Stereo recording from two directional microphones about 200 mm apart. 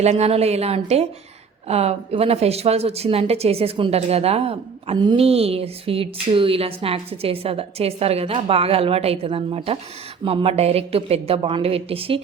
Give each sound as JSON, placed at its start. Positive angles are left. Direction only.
{"t": 0.0, "sound": "a woman's voice", "side_deg": -35}